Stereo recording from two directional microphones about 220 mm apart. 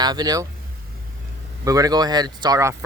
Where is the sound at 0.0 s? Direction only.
20° right (ahead or behind).